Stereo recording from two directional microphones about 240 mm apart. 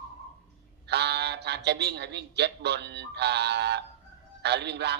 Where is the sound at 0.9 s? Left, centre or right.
Right.